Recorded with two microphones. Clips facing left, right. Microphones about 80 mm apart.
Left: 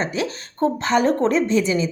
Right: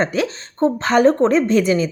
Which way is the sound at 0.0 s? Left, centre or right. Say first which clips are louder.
Right 4 dB; right.